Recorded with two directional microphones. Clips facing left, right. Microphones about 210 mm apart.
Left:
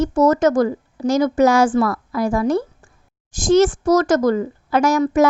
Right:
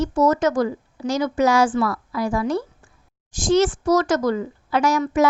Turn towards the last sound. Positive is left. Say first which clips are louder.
# left 4 dB
turn(degrees=45)  # may be behind; listen again after turning